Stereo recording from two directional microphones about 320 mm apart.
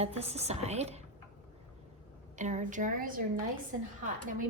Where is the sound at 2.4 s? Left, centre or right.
Right.